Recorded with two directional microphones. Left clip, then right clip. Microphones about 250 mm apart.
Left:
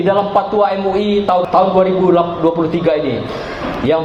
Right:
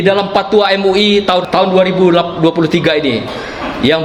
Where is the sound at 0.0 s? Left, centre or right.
Right.